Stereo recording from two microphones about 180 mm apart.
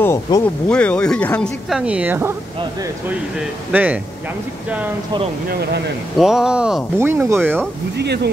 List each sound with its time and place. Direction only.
0.0 s speech: 15° left (ahead or behind)
1.7 s speech: 5° right (ahead or behind)
6.1 s speech: centre (ahead or behind)
8.0 s speech: 65° right (ahead or behind)